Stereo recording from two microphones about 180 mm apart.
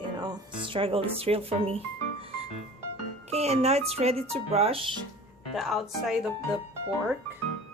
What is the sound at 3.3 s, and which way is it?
Speech, 35° right (ahead or behind).